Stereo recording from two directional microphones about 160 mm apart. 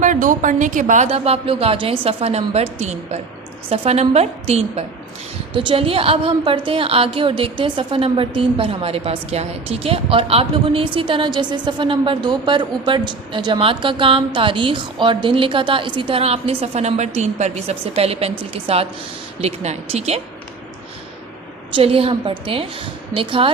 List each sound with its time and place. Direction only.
0.0 s a woman's voice: 55° right (ahead or behind)
1.0 s a woman's voice: 40° right (ahead or behind)
21.8 s a woman's voice: 35° right (ahead or behind)